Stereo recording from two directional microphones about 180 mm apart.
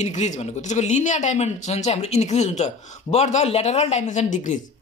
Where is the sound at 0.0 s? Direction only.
40° left (ahead or behind).